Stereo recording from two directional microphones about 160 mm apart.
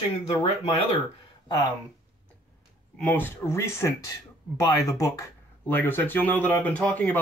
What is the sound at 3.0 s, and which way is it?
Speech, 10° left (ahead or behind).